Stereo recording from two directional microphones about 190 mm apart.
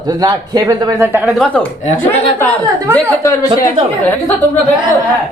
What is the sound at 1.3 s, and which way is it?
Speech, 5° left (ahead or behind).